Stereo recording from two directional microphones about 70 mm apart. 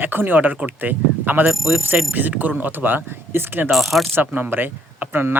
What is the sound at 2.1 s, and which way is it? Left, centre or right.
Speech, right.